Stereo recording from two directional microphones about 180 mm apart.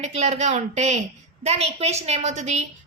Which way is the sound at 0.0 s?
40° right (ahead or behind).